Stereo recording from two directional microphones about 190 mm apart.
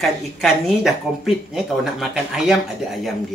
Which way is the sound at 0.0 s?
Centre (ahead or behind).